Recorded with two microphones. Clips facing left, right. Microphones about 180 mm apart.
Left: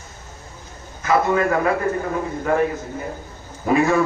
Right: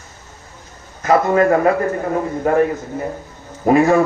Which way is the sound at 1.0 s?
40° right (ahead or behind).